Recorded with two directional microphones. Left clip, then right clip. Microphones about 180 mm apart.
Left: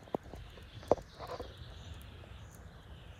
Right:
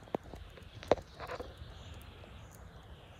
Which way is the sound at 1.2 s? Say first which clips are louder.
Right 1 dB; 35° left (ahead or behind).